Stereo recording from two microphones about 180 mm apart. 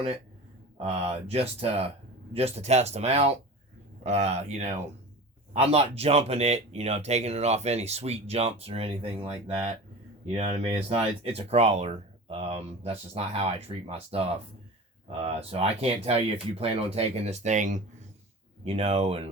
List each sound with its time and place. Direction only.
0.8 s speech: 35° right (ahead or behind)
10.3 s speech: 35° right (ahead or behind)
15.4 s speech: 35° right (ahead or behind)